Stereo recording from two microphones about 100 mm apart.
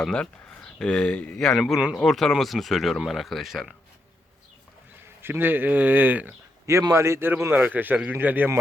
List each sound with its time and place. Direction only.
0.0 s speech: 5° left (ahead or behind)
5.2 s speech: 20° right (ahead or behind)
6.9 s a man's voice: 30° right (ahead or behind)